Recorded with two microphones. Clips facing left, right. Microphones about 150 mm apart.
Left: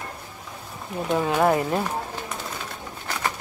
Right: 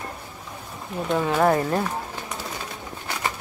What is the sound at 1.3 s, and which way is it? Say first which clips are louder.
Speech: right 1 dB; 5° left (ahead or behind).